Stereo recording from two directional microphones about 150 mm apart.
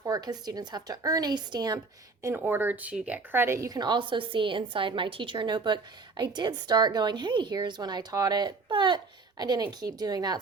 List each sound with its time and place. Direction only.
0.0 s a woman's voice: 25° right (ahead or behind)
2.2 s a woman's voice: 15° right (ahead or behind)